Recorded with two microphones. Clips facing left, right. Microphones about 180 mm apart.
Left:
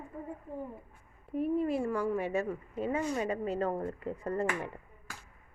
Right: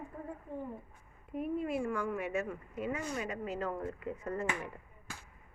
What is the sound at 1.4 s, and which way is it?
Speech, 35° left (ahead or behind).